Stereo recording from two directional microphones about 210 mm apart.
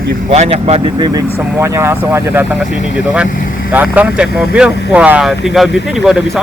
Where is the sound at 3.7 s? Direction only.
5° right (ahead or behind).